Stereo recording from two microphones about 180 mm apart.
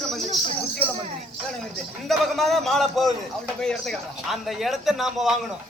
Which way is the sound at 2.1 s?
Centre (ahead or behind).